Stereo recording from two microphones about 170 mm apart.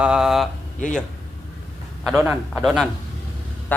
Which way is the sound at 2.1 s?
5° right (ahead or behind).